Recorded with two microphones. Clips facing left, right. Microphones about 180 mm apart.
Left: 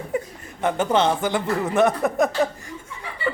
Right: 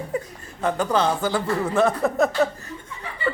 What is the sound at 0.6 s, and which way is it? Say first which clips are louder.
Speech: left 1 dB; 25° left (ahead or behind).